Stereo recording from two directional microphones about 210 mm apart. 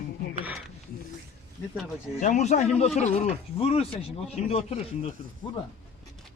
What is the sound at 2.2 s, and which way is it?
Speech, 35° left (ahead or behind).